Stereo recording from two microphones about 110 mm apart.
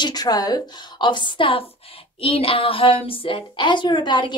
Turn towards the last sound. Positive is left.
turn(degrees=45)  # may be behind; listen again after turning